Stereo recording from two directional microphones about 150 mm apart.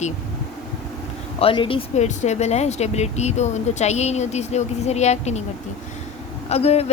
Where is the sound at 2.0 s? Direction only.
50° left (ahead or behind).